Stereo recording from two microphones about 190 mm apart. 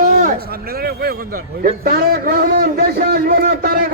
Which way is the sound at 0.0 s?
40° right (ahead or behind).